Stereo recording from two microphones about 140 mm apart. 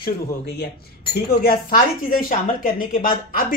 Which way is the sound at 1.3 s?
90° left.